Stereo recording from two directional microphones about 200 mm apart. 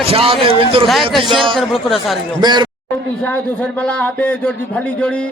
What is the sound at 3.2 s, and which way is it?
A man's voice, 5° left (ahead or behind).